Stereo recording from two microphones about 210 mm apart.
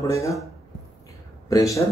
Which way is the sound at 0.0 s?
15° left (ahead or behind).